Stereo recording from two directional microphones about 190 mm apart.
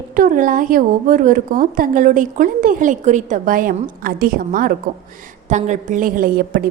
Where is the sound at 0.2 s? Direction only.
45° right (ahead or behind).